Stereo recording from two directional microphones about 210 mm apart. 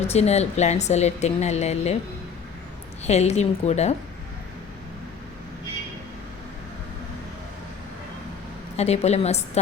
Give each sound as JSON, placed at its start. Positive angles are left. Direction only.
{"t": 0.1, "sound": "a woman's voice", "side_deg": 30}
{"t": 3.0, "sound": "a woman's voice", "side_deg": 30}
{"t": 8.7, "sound": "a woman's voice", "side_deg": 30}